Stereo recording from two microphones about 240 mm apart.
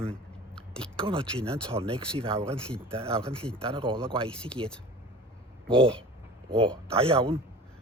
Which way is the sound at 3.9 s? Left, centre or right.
Centre.